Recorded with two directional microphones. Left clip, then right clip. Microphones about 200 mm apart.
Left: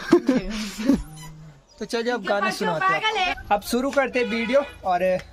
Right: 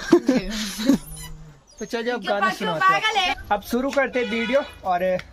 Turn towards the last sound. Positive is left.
turn(degrees=0)  # may be behind; listen again after turning